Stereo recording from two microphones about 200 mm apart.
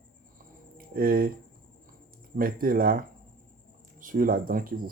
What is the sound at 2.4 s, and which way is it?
Speech, 45° right (ahead or behind).